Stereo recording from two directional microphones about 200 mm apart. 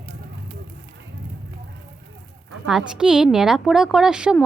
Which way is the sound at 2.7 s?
5° right (ahead or behind).